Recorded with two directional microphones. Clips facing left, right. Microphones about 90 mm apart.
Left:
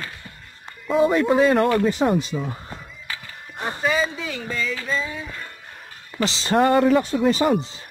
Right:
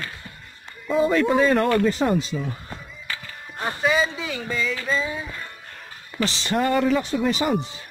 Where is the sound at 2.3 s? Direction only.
15° left (ahead or behind).